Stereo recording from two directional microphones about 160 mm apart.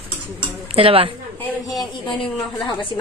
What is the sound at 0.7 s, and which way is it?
Speech, 35° right (ahead or behind).